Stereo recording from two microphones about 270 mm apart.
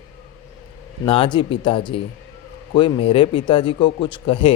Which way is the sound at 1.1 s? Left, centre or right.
Centre.